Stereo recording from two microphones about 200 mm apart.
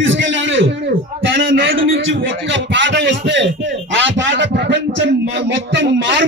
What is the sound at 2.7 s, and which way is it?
Speech, 65° right (ahead or behind).